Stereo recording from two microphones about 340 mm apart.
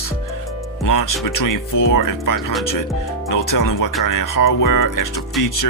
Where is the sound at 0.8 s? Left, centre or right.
Left.